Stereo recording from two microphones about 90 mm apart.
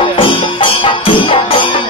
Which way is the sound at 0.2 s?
75° left (ahead or behind).